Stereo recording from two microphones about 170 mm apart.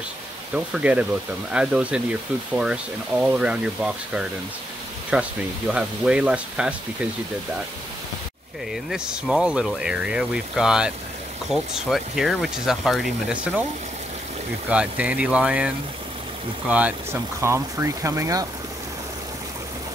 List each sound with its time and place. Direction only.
0.6 s speech: 5° right (ahead or behind)
8.9 s speech: 5° right (ahead or behind)
14.7 s speech: 5° right (ahead or behind)